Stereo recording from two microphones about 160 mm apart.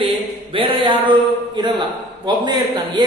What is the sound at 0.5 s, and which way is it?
Mantra, 30° right (ahead or behind).